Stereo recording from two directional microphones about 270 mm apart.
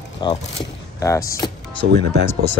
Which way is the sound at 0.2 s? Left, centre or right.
Centre.